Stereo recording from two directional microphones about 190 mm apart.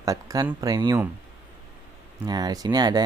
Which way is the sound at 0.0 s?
20° right (ahead or behind).